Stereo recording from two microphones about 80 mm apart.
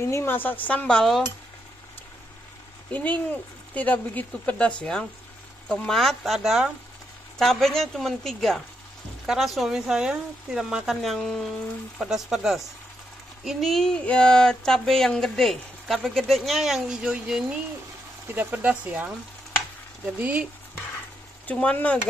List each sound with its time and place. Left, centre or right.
0.0 s dishes: left; by 1.2 s centre
2.9 s speech: centre
3.7 s dishes: centre
5.7 s speech: centre
18.3 s speech: right
20.2 s speech: right
21.5 s speech: centre